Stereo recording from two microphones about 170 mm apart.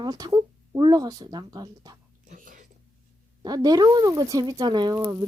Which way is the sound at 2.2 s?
50° right (ahead or behind).